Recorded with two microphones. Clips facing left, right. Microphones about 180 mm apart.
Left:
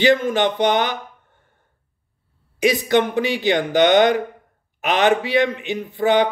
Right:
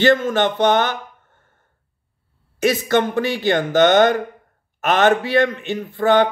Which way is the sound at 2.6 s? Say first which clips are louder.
Even; 15° left (ahead or behind).